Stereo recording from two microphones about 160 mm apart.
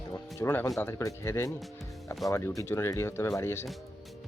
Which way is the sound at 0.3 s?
15° left (ahead or behind).